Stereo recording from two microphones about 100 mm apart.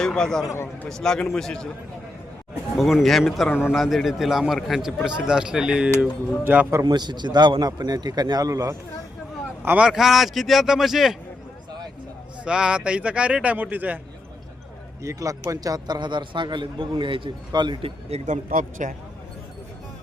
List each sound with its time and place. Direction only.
0.0 s a man's voice: 5° left (ahead or behind)
0.5 s a man's voice: 25° left (ahead or behind)
0.9 s a man's voice: 5° left (ahead or behind)
2.7 s a man's voice: centre (ahead or behind)
6.8 s a man's voice: 45° right (ahead or behind)
9.6 s a man's voice: 15° right (ahead or behind)
9.9 s a man's voice: centre (ahead or behind)
12.5 s a man's voice: 10° right (ahead or behind)
15.0 s a man's voice: 35° right (ahead or behind); by 17.7 s 50° right (ahead or behind)
18.1 s speech: 90° right